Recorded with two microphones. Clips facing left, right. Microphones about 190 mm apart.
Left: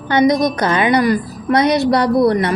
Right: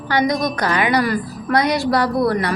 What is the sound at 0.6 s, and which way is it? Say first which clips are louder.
A woman's voice: left 3 dB; 20° left (ahead or behind).